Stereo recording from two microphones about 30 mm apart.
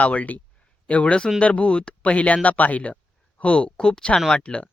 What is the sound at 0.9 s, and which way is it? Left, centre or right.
Speech, left.